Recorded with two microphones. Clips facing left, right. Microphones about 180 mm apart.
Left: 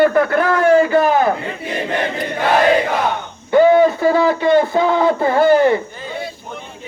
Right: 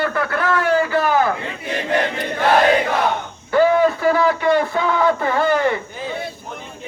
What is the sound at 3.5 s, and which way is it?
A man's voice, 25° left (ahead or behind).